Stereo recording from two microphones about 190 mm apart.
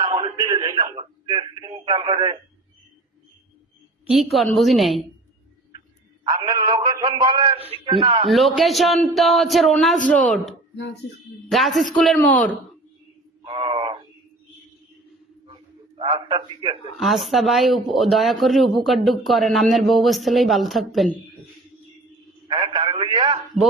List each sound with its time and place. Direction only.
0.0 s speech: 25° right (ahead or behind)
4.0 s speech: centre (ahead or behind)
6.2 s a man's voice: 20° right (ahead or behind)
8.3 s speech: centre (ahead or behind)
11.5 s speech: centre (ahead or behind)
13.4 s a sound: 25° right (ahead or behind)
15.4 s a sound: 25° right (ahead or behind)
17.0 s speech: centre (ahead or behind)
22.4 s a sound: 25° right (ahead or behind)